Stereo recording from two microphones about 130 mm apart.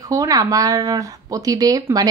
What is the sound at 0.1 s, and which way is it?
Speech, 25° right (ahead or behind).